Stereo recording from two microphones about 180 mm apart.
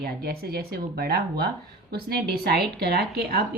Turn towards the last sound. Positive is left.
turn(degrees=-60)  # may be behind; listen again after turning